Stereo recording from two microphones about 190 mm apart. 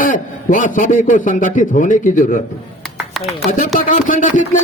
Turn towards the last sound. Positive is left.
turn(degrees=45)  # may be behind; listen again after turning